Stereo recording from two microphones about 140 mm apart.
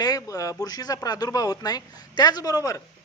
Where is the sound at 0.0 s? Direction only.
25° left (ahead or behind).